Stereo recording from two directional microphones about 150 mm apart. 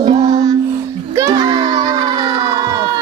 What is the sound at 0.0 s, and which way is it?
Music, 30° right (ahead or behind).